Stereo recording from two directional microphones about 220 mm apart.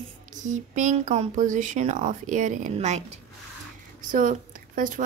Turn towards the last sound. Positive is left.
turn(degrees=-35)  # may be behind; listen again after turning